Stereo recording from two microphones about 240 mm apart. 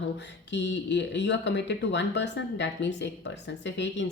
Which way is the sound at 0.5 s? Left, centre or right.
Left.